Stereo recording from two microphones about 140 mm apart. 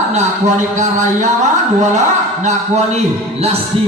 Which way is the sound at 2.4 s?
55° right (ahead or behind).